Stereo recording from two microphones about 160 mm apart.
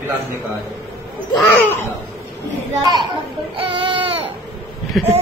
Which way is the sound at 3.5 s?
30° right (ahead or behind).